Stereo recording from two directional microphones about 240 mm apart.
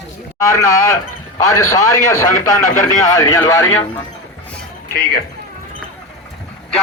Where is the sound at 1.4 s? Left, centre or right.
Centre.